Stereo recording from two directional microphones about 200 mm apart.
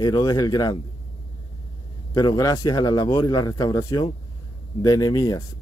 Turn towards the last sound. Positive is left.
turn(degrees=20)  # may be behind; listen again after turning